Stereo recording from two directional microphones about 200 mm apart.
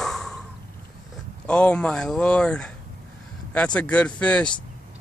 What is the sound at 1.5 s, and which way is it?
Speech, 5° left (ahead or behind).